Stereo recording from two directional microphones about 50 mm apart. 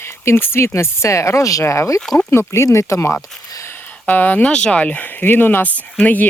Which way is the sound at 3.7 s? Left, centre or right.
Left.